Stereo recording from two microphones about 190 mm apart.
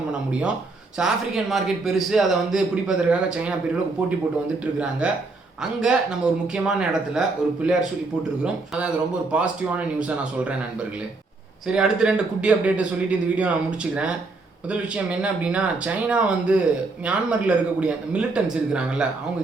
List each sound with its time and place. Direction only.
0.9 s speech: centre (ahead or behind)
4.6 s speech: 5° right (ahead or behind)
9.3 s speech: 5° right (ahead or behind)
11.7 s speech: 5° right (ahead or behind)